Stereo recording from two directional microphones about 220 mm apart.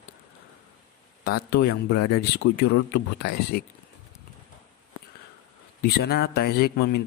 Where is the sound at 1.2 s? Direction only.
45° left (ahead or behind).